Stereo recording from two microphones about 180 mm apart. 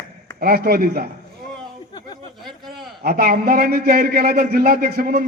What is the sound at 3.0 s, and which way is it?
A man's voice, 55° right (ahead or behind).